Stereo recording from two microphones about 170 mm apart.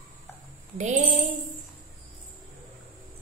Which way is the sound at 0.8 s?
45° right (ahead or behind).